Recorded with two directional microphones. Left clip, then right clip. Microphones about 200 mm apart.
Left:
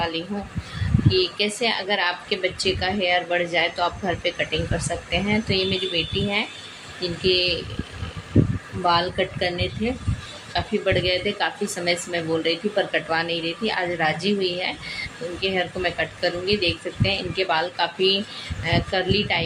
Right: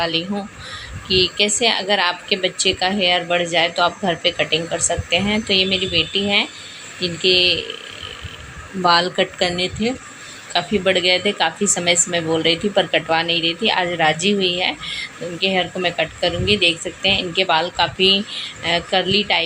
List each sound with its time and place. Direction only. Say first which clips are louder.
0.0 s a woman's voice: right 5 dB; 15° right (ahead or behind)
8.8 s a woman's voice: right 5 dB; 15° right (ahead or behind)